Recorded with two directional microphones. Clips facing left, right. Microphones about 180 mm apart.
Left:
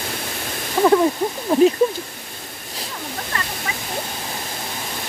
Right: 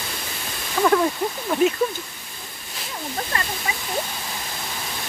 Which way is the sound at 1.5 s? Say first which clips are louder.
Left 6 dB; 35° left (ahead or behind).